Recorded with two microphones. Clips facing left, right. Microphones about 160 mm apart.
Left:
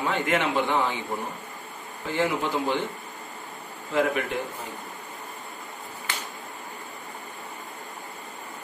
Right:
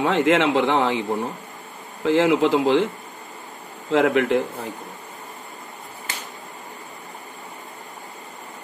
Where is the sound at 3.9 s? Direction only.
90° right.